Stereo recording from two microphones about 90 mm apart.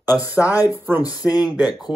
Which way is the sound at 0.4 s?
35° left (ahead or behind).